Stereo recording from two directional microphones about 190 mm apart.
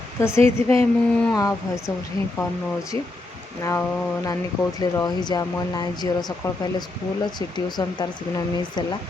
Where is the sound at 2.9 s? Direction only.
30° right (ahead or behind).